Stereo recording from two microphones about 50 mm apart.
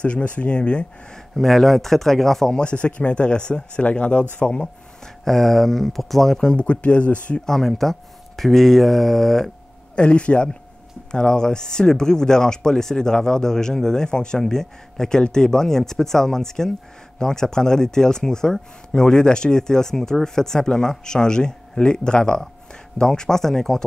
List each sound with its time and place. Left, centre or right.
0.0 s speech: left
1.3 s speech: centre
2.6 s speech: left
5.0 s speech: centre
6.5 s speech: left
7.4 s speech: centre
9.9 s speech: left; by 23.8 s centre